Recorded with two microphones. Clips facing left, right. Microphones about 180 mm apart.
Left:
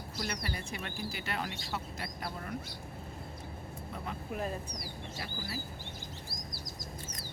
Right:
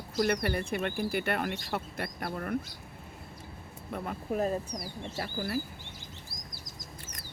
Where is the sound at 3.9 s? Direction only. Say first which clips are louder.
Right 7 dB; 45° right (ahead or behind).